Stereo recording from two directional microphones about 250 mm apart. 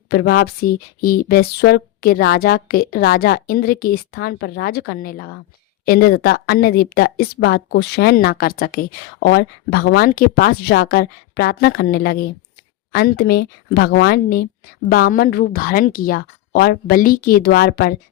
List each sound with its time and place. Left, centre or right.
0.1 s a woman's voice: left